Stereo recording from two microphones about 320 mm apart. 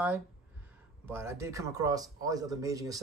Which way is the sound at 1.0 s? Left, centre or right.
Centre.